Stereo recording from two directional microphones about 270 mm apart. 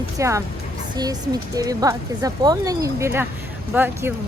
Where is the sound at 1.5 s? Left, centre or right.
Centre.